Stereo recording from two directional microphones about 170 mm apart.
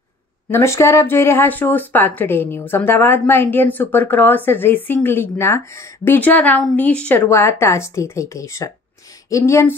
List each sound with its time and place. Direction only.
0.5 s a woman's voice: 15° left (ahead or behind)